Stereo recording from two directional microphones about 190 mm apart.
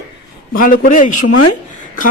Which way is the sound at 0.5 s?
45° left (ahead or behind).